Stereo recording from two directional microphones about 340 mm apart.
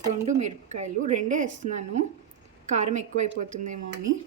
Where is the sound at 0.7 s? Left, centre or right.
Right.